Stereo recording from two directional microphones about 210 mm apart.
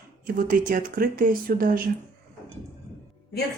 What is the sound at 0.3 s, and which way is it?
A woman's voice, 40° right (ahead or behind).